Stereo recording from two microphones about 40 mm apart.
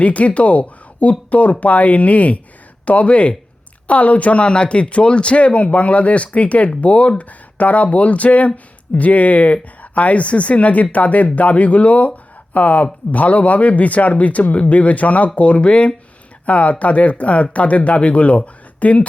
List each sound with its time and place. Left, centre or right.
0.0 s speech: left